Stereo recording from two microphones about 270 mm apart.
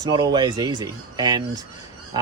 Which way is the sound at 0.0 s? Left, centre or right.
Centre.